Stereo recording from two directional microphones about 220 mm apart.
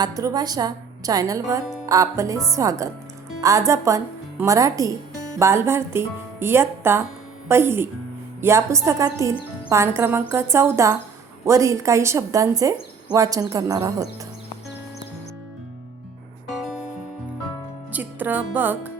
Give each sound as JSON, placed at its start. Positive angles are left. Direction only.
{"t": 0.0, "sound": "a woman's voice", "side_deg": -15}
{"t": 17.9, "sound": "music", "side_deg": -10}